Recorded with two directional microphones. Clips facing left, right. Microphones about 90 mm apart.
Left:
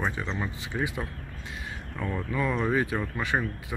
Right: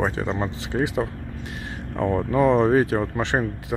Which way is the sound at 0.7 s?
40° right (ahead or behind).